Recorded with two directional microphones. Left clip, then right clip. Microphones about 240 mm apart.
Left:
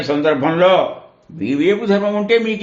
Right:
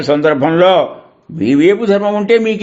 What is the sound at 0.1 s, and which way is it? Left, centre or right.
A man's voice, right.